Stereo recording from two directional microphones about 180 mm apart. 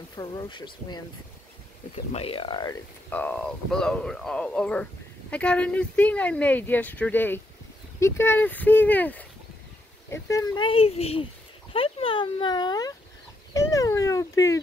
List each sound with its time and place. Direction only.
0.1 s speech: 25° left (ahead or behind)
2.1 s speech: 30° left (ahead or behind)
3.1 s speech: 10° left (ahead or behind)
13.5 s cat: 20° left (ahead or behind)